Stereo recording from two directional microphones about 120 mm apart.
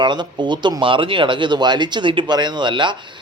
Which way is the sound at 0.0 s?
40° right (ahead or behind).